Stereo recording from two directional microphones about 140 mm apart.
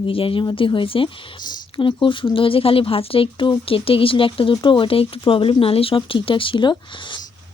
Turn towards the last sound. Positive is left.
turn(degrees=35)  # may be behind; listen again after turning